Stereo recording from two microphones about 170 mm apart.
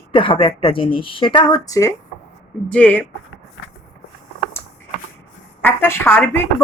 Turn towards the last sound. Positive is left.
turn(degrees=15)  # may be behind; listen again after turning